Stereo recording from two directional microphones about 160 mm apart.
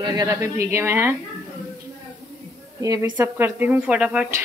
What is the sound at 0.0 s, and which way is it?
Speech, 25° right (ahead or behind).